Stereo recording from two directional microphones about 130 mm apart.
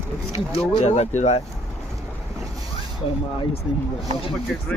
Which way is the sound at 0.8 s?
60° left (ahead or behind).